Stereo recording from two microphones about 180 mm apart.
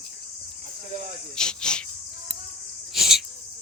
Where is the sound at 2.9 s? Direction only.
Centre (ahead or behind).